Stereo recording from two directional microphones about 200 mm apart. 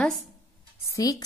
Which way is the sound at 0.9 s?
15° left (ahead or behind).